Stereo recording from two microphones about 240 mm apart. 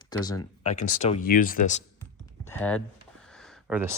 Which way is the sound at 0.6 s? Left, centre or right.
Left.